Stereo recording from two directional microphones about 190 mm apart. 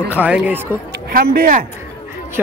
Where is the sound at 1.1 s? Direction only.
55° right (ahead or behind).